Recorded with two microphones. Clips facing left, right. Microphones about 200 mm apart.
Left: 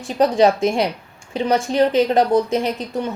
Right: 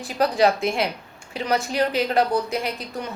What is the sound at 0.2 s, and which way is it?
A woman's voice, 25° left (ahead or behind).